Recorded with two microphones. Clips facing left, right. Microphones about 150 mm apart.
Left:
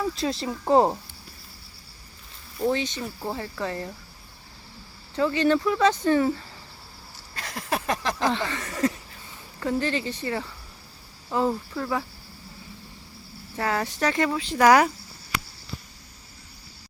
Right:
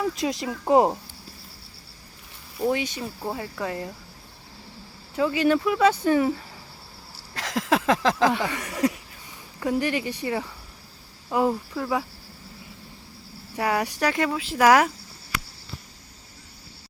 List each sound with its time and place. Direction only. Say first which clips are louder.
0.2 s speech: right 1 dB; 15° right (ahead or behind)
2.6 s speech: even; 10° right (ahead or behind)
5.1 s speech: even; 10° right (ahead or behind)
7.3 s a sound: right 6 dB; 90° right
8.3 s speech: right 2 dB; 10° right (ahead or behind)
13.6 s speech: right 2 dB; 10° right (ahead or behind)